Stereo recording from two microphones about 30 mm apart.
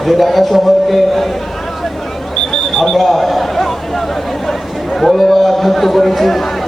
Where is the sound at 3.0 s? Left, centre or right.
Centre.